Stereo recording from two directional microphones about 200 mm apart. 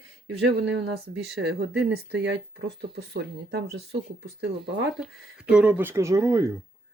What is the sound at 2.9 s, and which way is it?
Speech, 55° right (ahead or behind).